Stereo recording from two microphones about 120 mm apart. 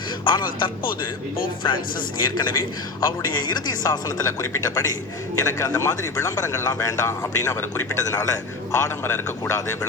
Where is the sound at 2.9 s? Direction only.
35° left (ahead or behind).